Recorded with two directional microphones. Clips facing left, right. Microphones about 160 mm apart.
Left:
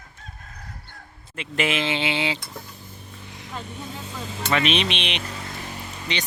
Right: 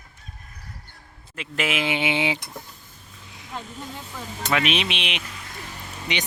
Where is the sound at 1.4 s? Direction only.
5° right (ahead or behind).